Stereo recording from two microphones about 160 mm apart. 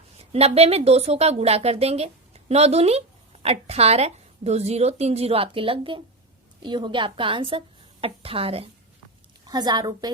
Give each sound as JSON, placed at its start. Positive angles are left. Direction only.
{"t": 0.2, "sound": "speech", "side_deg": -40}
{"t": 9.5, "sound": "a woman's voice", "side_deg": -25}